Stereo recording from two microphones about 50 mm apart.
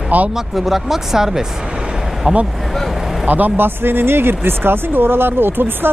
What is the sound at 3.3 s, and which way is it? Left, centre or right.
Speech, right.